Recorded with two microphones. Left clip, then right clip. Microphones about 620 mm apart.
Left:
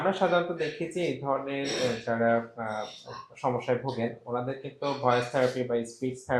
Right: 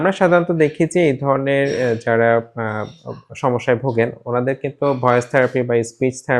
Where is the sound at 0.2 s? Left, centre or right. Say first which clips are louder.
Right 12 dB; right.